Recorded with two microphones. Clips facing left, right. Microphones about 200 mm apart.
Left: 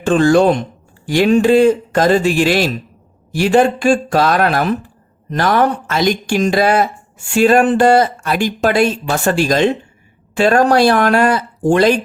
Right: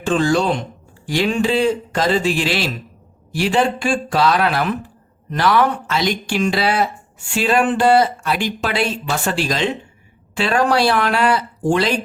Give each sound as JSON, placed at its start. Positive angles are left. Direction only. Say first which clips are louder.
{"t": 0.0, "sound": "speech", "louder": "left 6 dB", "side_deg": 55}